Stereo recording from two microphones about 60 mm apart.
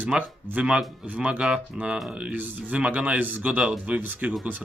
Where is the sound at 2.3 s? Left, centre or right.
Right.